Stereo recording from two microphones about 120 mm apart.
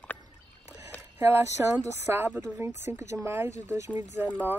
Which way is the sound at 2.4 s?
20° right (ahead or behind).